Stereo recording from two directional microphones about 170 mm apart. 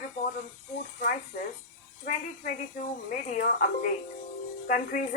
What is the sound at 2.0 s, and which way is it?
A woman's voice, 50° left (ahead or behind).